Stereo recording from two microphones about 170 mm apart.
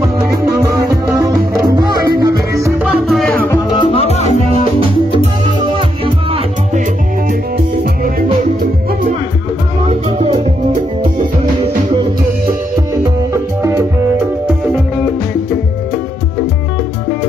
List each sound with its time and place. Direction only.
0.3 s music: 15° right (ahead or behind)
2.8 s music: centre (ahead or behind)
3.7 s music: 30° left (ahead or behind)
5.6 s music: 30° right (ahead or behind)
7.5 s music: 65° right (ahead or behind)
9.8 s music: 35° right (ahead or behind)
13.3 s music: 15° right (ahead or behind)